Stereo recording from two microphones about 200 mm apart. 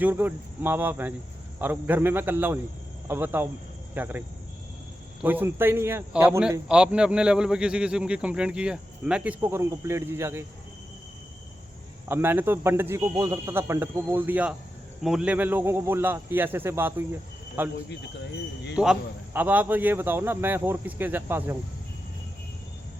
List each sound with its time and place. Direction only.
0.0 s a man's voice: 10° right (ahead or behind)
5.2 s a man's voice: 10° right (ahead or behind)
12.0 s a man's voice: 10° right (ahead or behind)
17.8 s speech: 60° left (ahead or behind)
18.8 s a man's voice: 5° right (ahead or behind)